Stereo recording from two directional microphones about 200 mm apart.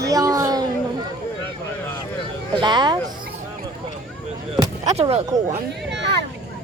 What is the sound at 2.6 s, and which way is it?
Speech, 20° right (ahead or behind).